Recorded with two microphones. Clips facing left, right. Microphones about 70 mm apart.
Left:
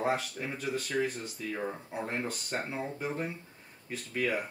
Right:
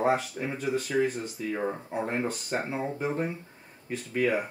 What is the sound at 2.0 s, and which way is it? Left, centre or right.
Speech, centre.